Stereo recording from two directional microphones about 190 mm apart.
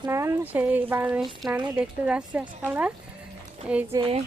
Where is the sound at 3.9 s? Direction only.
30° right (ahead or behind).